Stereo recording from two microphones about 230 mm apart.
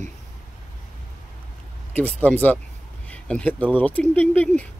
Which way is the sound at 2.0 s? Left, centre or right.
Centre.